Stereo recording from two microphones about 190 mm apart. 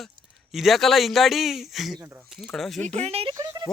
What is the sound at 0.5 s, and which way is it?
Speech, centre (ahead or behind).